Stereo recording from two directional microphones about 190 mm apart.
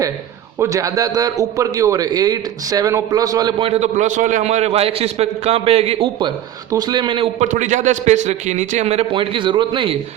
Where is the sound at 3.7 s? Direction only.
35° right (ahead or behind).